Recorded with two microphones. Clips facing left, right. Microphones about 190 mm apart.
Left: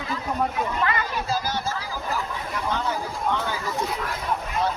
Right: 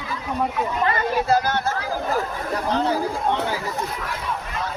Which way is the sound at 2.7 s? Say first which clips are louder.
Right 8 dB; 35° right (ahead or behind).